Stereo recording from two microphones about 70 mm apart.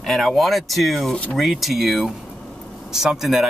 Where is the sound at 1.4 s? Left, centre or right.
Centre.